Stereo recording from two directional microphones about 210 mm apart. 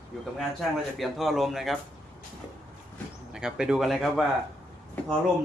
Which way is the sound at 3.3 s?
5° right (ahead or behind).